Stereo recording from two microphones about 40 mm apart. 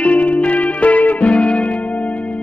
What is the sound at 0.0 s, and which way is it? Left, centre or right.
Music, left.